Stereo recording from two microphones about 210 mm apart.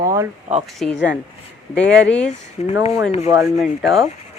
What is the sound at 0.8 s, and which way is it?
Speech, centre (ahead or behind).